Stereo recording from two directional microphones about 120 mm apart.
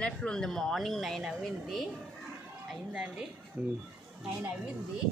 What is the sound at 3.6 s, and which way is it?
Speech, 15° right (ahead or behind).